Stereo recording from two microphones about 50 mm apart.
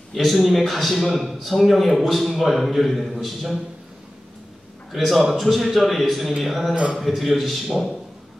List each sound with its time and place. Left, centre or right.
0.1 s a man's voice: centre
4.9 s a man's voice: centre